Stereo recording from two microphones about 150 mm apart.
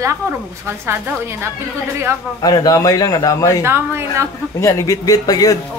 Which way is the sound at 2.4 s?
25° left (ahead or behind).